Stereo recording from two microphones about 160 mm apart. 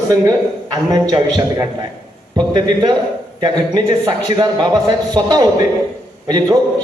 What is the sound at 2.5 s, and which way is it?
A man's voice, 25° right (ahead or behind).